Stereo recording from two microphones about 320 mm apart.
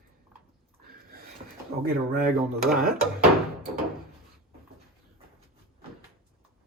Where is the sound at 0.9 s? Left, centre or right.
Right.